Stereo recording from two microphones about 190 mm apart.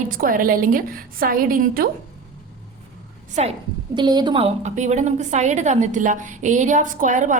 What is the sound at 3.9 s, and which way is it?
A woman's voice, 25° right (ahead or behind).